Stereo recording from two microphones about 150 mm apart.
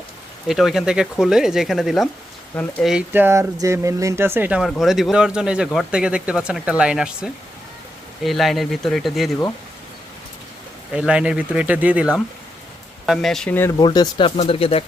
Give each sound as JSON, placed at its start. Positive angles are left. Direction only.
{"t": 0.4, "sound": "speech", "side_deg": 0}
{"t": 10.9, "sound": "speech", "side_deg": -5}
{"t": 13.1, "sound": "speech", "side_deg": 0}
{"t": 13.7, "sound": "speech", "side_deg": 30}